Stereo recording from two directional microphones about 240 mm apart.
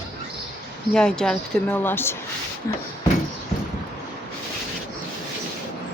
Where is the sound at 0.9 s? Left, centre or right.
Centre.